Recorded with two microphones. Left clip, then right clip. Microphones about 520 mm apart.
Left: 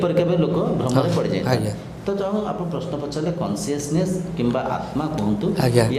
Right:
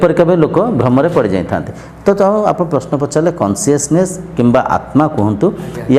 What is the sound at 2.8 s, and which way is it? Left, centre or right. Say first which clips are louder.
A man's voice: right 12 dB; right.